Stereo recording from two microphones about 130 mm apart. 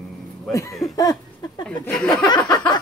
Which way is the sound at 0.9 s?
30° left (ahead or behind).